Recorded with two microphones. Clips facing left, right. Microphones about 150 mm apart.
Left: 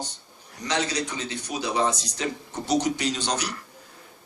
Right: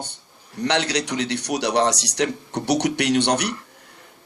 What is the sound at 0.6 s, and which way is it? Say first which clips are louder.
A man's voice: right 5 dB; 70° right (ahead or behind).